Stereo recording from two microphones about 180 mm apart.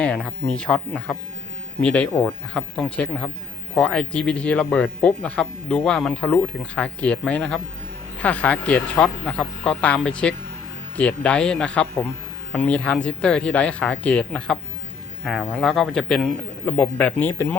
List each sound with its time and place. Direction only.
0.0 s speech: 5° left (ahead or behind)